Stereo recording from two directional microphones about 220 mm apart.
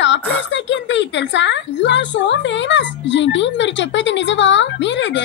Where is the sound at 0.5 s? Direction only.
55° left (ahead or behind).